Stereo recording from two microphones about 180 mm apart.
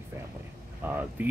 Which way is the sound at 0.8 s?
10° right (ahead or behind).